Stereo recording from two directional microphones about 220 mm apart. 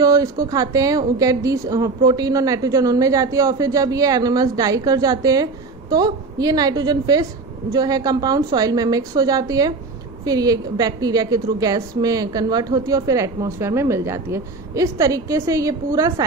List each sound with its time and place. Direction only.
0.0 s a woman's voice: 15° right (ahead or behind)